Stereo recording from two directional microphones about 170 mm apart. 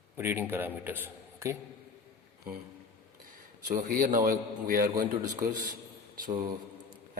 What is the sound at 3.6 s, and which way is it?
A man's voice, 55° right (ahead or behind).